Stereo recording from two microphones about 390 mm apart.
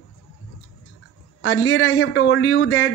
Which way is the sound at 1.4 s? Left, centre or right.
Left.